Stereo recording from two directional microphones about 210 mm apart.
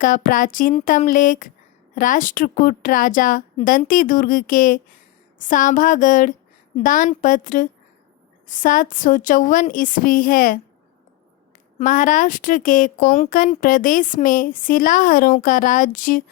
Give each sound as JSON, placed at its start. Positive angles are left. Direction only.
{"t": 0.0, "sound": "speech", "side_deg": 40}
{"t": 11.8, "sound": "speech", "side_deg": 40}